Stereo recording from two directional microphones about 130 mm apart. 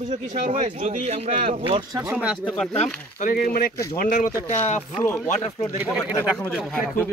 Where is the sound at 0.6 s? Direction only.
50° right (ahead or behind).